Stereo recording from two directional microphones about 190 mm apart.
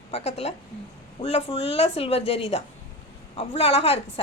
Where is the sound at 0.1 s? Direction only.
30° left (ahead or behind).